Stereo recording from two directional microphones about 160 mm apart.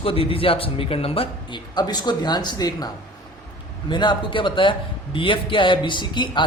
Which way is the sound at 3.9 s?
30° left (ahead or behind).